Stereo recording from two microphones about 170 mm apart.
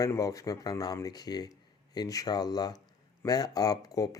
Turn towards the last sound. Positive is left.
turn(degrees=20)  # may be behind; listen again after turning